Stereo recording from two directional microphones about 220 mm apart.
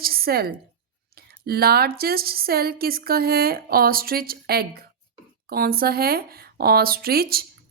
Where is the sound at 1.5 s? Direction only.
45° right (ahead or behind).